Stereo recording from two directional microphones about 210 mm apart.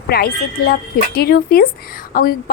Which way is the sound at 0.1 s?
45° left (ahead or behind).